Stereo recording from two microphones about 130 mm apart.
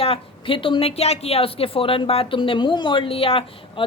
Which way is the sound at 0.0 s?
45° left (ahead or behind).